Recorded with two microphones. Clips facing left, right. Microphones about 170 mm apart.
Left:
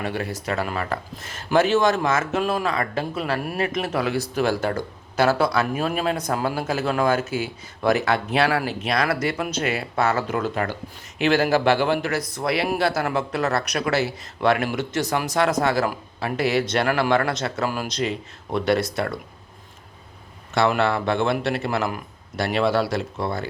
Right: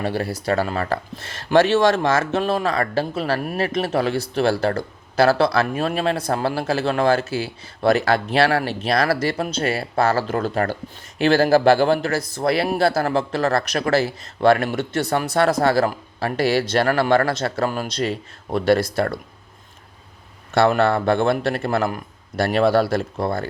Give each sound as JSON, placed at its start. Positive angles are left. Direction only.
{"t": 0.0, "sound": "speech", "side_deg": -35}
{"t": 14.9, "sound": "speech", "side_deg": -60}
{"t": 15.4, "sound": "a man's voice", "side_deg": -35}
{"t": 20.7, "sound": "a man's voice", "side_deg": -45}